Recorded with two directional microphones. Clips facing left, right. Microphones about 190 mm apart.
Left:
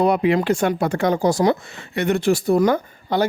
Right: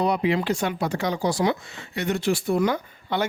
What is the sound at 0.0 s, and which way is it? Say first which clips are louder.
Speech: left 5 dB; 55° left (ahead or behind).